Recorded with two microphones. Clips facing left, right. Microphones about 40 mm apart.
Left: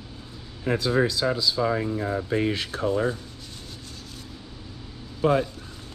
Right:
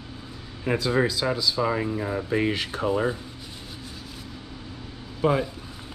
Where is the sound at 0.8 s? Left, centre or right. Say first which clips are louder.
Left 1 dB; right.